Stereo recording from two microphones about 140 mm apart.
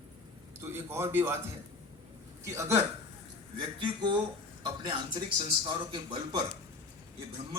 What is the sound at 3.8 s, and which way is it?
A man's voice, 35° right (ahead or behind).